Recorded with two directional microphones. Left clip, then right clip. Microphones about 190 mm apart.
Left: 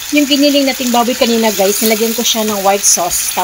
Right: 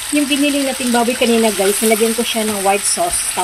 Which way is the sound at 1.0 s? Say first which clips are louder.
Left 1 dB; 15° left (ahead or behind).